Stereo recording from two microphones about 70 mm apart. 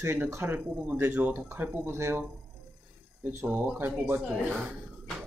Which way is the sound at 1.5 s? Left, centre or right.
Right.